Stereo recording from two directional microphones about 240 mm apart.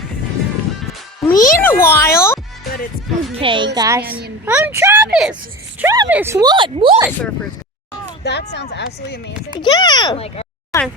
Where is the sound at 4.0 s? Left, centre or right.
Right.